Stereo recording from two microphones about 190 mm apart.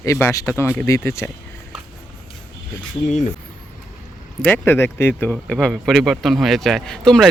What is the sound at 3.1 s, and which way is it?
Speech, 40° left (ahead or behind).